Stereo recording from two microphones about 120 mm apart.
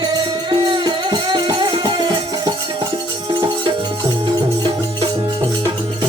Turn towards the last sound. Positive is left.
turn(degrees=-40)  # may be behind; listen again after turning